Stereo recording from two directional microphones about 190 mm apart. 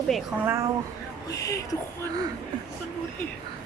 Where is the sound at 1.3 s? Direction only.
20° left (ahead or behind).